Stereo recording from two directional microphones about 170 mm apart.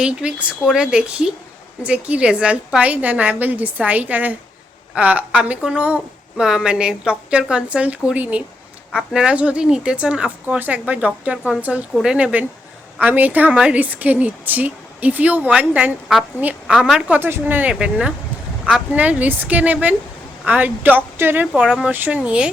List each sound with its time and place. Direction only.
0.0 s a woman's voice: 5° right (ahead or behind)